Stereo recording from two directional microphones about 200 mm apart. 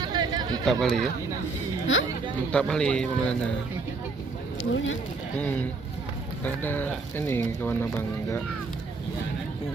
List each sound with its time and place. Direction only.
0.0 s chatter: 20° right (ahead or behind)
0.6 s speech: centre (ahead or behind)
2.5 s speech: 5° left (ahead or behind)
4.7 s speech: 75° left (ahead or behind)
5.4 s speech: 10° left (ahead or behind)